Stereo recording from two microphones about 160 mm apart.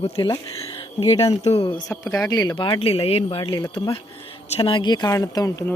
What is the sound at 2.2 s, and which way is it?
Speech, 25° left (ahead or behind).